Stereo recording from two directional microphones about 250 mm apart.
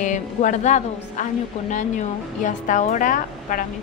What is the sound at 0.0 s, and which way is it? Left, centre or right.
A woman's voice, left.